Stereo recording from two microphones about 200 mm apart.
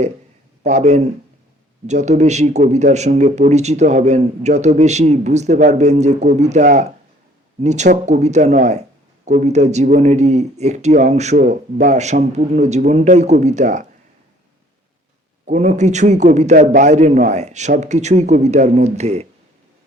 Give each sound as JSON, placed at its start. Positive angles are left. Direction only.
{"t": 0.6, "sound": "a man's voice", "side_deg": -35}
{"t": 15.4, "sound": "a man's voice", "side_deg": -35}